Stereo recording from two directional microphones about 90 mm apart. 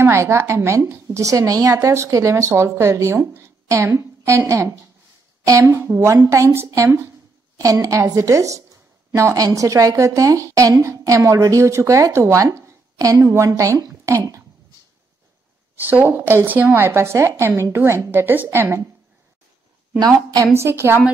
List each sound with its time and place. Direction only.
0.0 s a woman's voice: 30° right (ahead or behind)
5.7 s a woman's voice: 30° right (ahead or behind)
15.7 s speech: 20° right (ahead or behind)
20.0 s a woman's voice: 45° right (ahead or behind)
20.5 s speech: 30° right (ahead or behind)